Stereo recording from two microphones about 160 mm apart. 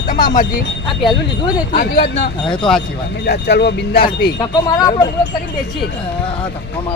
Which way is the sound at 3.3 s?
90° left.